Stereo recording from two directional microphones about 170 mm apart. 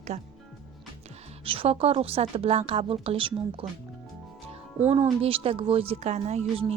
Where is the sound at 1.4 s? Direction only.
35° right (ahead or behind).